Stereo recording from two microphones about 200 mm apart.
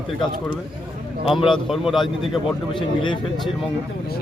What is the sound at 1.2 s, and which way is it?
A man's voice, centre (ahead or behind).